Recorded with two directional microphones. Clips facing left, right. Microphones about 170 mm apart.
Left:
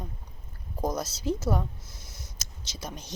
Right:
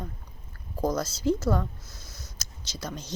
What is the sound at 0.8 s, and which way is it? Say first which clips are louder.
Speech: right 3 dB; 20° left (ahead or behind).